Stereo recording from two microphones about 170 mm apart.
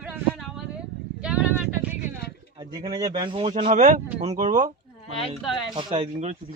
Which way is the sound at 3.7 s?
45° right (ahead or behind).